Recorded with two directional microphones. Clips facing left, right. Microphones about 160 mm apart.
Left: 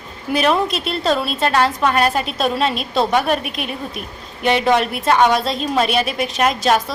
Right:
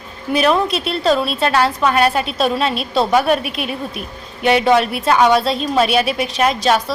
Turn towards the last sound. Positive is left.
turn(degrees=0)  # may be behind; listen again after turning